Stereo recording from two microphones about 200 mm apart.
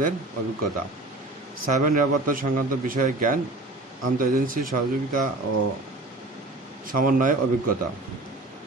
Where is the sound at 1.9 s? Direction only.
45° right (ahead or behind).